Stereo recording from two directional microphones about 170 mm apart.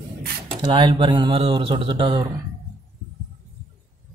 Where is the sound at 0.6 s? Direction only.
30° right (ahead or behind).